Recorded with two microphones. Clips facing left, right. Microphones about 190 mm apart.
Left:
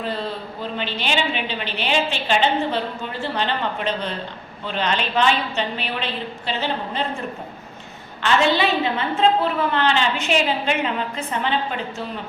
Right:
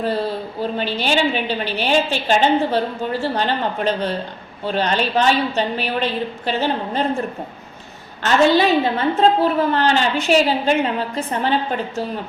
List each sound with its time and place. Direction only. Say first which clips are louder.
0.6 s a woman's voice: right 5 dB; 40° right (ahead or behind)
8.2 s a woman's voice: right 4 dB; 40° right (ahead or behind)